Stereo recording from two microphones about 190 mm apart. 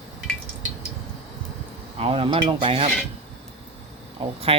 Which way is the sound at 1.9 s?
30° right (ahead or behind).